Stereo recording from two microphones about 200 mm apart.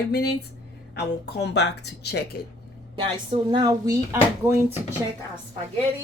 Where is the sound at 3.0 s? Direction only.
25° right (ahead or behind).